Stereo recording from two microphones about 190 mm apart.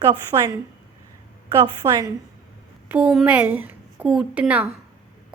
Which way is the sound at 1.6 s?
20° right (ahead or behind).